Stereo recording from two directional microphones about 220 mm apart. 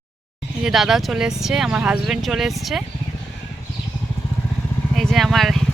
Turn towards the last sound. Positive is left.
turn(degrees=0)  # may be behind; listen again after turning